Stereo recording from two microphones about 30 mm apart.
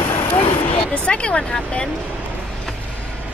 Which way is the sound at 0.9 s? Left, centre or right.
Left.